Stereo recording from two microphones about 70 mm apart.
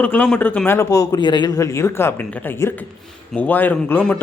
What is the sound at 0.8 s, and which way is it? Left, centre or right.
Speech, left.